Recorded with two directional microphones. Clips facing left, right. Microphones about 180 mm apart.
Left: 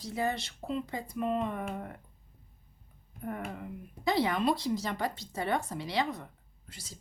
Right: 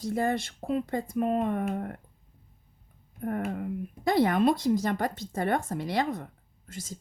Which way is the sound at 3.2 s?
50° right (ahead or behind).